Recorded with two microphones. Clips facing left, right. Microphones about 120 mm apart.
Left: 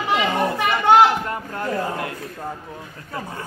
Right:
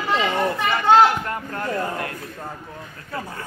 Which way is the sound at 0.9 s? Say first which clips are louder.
Left 1 dB; 20° left (ahead or behind).